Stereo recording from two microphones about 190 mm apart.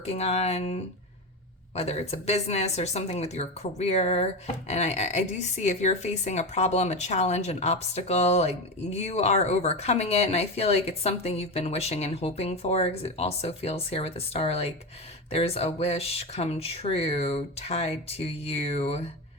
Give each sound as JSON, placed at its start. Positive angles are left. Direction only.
{"t": 0.0, "sound": "speech", "side_deg": 35}